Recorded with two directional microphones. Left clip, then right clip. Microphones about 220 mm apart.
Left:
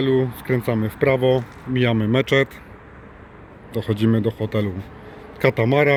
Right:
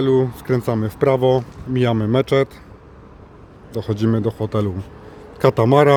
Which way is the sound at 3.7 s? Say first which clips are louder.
Even; centre (ahead or behind).